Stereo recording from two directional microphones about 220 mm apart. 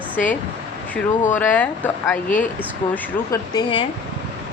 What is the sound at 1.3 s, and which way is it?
Speech, 5° left (ahead or behind).